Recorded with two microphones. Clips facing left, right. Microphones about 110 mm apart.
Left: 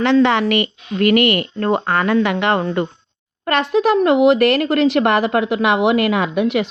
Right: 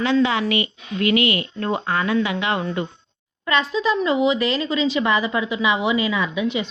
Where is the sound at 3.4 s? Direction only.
65° left (ahead or behind).